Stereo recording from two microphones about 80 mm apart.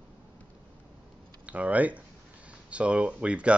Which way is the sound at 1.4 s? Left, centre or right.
Centre.